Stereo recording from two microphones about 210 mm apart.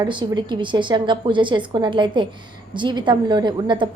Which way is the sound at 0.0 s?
20° right (ahead or behind).